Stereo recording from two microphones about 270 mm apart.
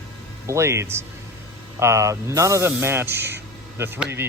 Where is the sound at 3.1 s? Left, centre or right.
Right.